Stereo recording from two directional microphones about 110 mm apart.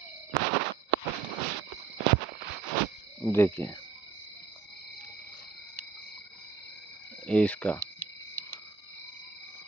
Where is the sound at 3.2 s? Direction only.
25° left (ahead or behind).